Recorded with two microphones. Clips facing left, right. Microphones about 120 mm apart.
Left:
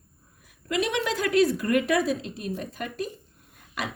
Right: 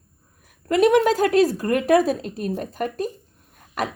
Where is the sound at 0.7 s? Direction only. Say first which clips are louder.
Right 10 dB; 45° right (ahead or behind).